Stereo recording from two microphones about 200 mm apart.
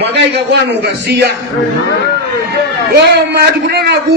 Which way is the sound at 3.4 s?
50° right (ahead or behind).